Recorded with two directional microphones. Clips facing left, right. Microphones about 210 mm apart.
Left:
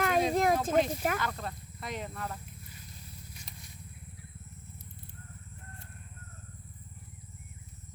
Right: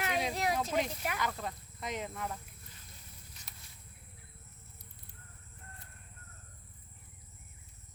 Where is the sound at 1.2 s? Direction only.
10° right (ahead or behind).